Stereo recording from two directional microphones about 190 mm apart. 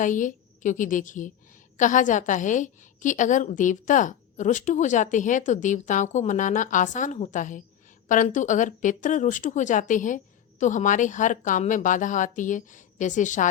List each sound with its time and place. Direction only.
0.0 s a woman's voice: 40° left (ahead or behind)